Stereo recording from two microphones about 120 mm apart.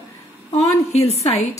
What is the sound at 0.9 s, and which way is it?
Speech, 60° left (ahead or behind).